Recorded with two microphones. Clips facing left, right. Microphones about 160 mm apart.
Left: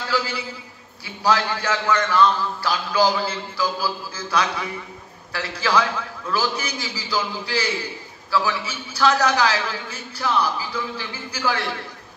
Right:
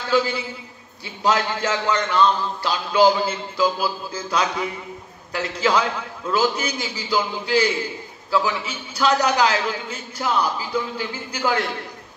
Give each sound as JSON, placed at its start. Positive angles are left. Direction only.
{"t": 0.1, "sound": "a man's voice", "side_deg": -20}